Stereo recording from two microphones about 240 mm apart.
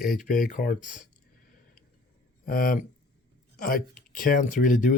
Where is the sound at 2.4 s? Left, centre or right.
Left.